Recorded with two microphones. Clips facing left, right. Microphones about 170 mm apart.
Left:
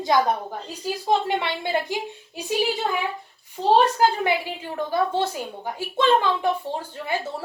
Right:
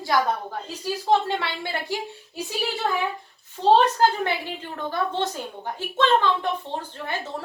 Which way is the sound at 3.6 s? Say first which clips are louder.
Even; 10° left (ahead or behind).